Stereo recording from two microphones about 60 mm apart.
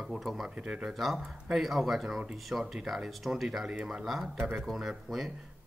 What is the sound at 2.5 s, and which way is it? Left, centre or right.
Speech, centre.